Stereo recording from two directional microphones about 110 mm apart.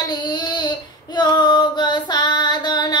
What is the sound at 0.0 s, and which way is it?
Child singing, 40° left (ahead or behind).